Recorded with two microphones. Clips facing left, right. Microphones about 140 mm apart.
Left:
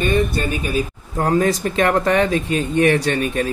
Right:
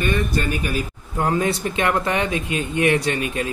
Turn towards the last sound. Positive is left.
turn(degrees=35)  # may be behind; listen again after turning